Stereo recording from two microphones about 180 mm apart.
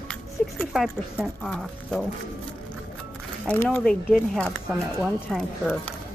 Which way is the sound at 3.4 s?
10° left (ahead or behind).